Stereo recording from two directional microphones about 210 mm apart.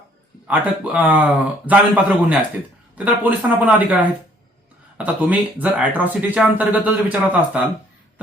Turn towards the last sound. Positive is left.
turn(degrees=-5)  # may be behind; listen again after turning